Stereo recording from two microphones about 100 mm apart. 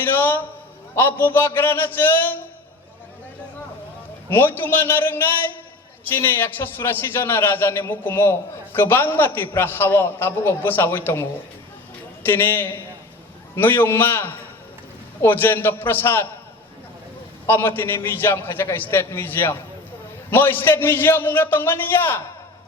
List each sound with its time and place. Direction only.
0.0 s a sound: 20° left (ahead or behind)
0.9 s a man's voice: 20° left (ahead or behind)
4.3 s a man's voice: 20° left (ahead or behind)
17.4 s a man's voice: 20° left (ahead or behind)